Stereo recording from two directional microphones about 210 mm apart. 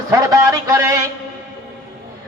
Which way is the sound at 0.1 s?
15° right (ahead or behind).